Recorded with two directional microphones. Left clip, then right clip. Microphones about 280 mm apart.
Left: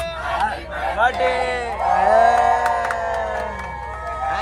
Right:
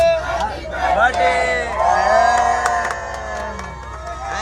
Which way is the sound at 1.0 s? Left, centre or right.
Centre.